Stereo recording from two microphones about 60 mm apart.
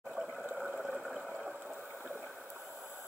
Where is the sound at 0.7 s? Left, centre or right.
Centre.